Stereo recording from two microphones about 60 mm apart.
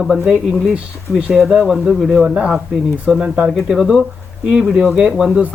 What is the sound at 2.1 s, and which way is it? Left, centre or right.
Speech, centre.